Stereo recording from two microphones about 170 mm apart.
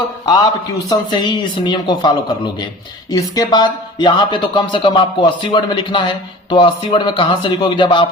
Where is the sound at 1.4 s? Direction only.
25° left (ahead or behind).